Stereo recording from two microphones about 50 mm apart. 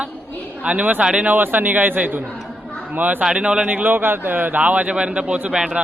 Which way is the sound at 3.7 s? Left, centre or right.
Right.